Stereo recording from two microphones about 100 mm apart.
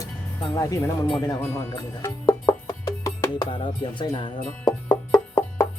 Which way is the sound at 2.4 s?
35° left (ahead or behind).